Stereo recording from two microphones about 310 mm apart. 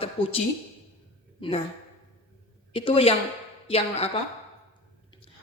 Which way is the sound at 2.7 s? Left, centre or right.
Centre.